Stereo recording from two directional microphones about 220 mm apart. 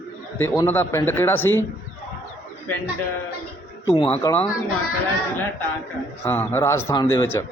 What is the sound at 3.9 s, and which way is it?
Speech, 25° left (ahead or behind).